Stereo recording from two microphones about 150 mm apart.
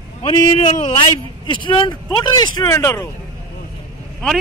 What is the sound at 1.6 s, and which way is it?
Speech, 30° left (ahead or behind).